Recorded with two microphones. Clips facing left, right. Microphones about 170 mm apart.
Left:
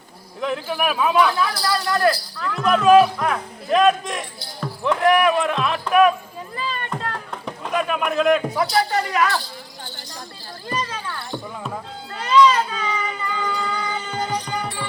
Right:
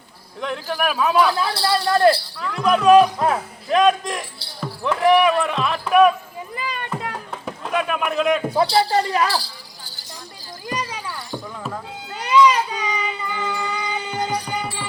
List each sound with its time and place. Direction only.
0.4 s a man's voice: centre (ahead or behind)
1.4 s speech: 30° right (ahead or behind)
2.4 s a man's voice: centre (ahead or behind)
3.2 s speech: 25° right (ahead or behind)
3.7 s a man's voice: centre (ahead or behind)
6.6 s a sound: 15° right (ahead or behind)
7.6 s a man's voice: centre (ahead or behind)
8.4 s speech: 30° right (ahead or behind)
10.7 s a sound: 15° right (ahead or behind)